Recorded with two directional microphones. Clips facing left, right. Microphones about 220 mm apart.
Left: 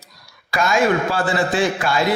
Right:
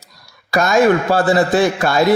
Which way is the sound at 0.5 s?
40° right (ahead or behind).